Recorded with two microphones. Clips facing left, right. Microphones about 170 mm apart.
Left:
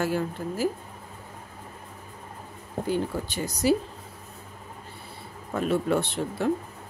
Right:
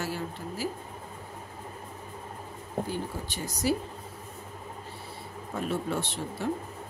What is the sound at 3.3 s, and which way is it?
Speech, 65° left (ahead or behind).